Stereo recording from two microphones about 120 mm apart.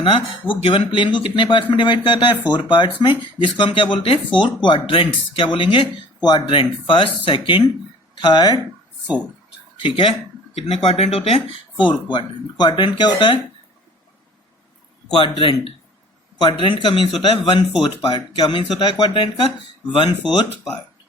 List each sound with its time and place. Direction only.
0.0 s speech: 50° left (ahead or behind); by 8.6 s 35° left (ahead or behind)
9.7 s a sound: 45° left (ahead or behind)
10.7 s speech: 55° left (ahead or behind)
12.1 s speech: 40° left (ahead or behind)
15.1 s speech: 45° left (ahead or behind)